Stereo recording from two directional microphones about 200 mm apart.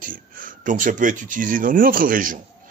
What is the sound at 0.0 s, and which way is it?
A man's voice, 45° right (ahead or behind).